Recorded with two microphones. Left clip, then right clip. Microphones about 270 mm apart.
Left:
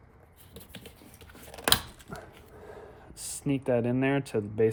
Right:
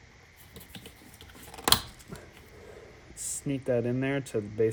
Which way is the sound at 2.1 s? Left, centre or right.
Centre.